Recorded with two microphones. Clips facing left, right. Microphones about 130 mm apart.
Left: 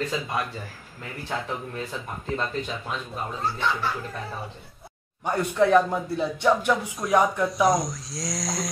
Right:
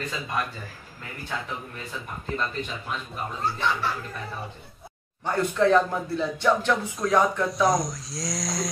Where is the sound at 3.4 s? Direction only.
Centre (ahead or behind).